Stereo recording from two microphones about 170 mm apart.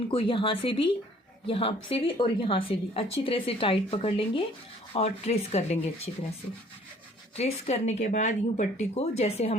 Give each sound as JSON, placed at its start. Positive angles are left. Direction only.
{"t": 0.1, "sound": "a woman's voice", "side_deg": 30}
{"t": 7.3, "sound": "a woman's voice", "side_deg": 40}